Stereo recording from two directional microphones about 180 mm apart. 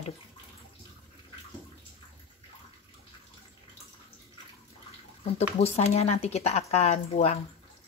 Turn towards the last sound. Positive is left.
turn(degrees=35)  # may be behind; listen again after turning